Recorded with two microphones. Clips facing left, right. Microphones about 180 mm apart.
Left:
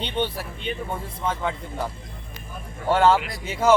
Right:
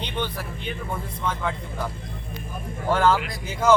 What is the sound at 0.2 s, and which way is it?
Speech, 25° left (ahead or behind).